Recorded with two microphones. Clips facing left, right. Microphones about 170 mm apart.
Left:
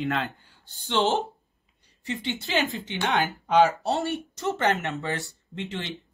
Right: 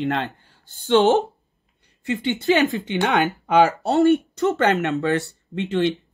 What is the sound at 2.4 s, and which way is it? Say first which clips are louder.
Speech: right 10 dB; 60° right (ahead or behind).